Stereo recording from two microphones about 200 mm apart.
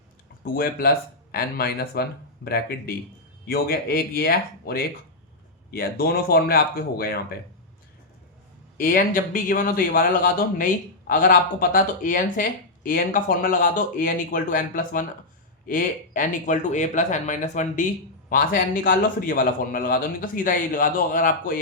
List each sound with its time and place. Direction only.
0.4 s speech: 45° left (ahead or behind)
8.8 s speech: 45° left (ahead or behind)